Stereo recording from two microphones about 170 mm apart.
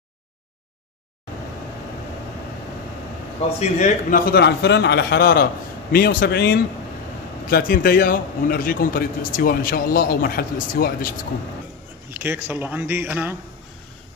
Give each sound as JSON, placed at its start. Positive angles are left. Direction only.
{"t": 3.5, "sound": "a man's voice", "side_deg": 45}
{"t": 4.3, "sound": "a man's voice", "side_deg": 75}
{"t": 7.4, "sound": "a man's voice", "side_deg": 55}
{"t": 12.1, "sound": "a man's voice", "side_deg": -15}